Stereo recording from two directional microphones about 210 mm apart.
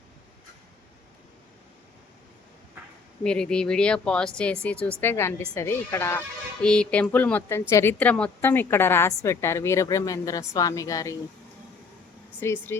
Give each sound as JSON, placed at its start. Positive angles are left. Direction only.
{"t": 3.2, "sound": "speech", "side_deg": 5}
{"t": 12.4, "sound": "speech", "side_deg": 10}